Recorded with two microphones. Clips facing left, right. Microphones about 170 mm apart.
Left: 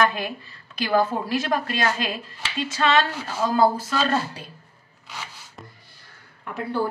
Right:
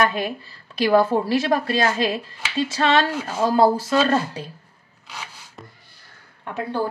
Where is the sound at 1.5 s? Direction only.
35° right (ahead or behind).